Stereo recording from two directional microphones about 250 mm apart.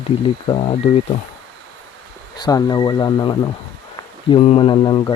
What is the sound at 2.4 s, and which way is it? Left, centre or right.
Speech, centre.